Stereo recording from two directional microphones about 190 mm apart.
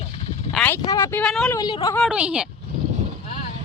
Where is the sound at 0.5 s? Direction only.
10° left (ahead or behind).